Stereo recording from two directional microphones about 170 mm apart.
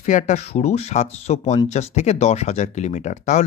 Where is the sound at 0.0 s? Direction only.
45° left (ahead or behind).